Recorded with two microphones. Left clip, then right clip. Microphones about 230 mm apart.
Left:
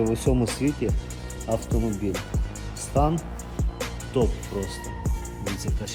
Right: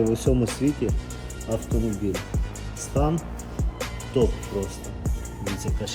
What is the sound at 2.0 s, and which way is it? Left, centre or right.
Speech, centre.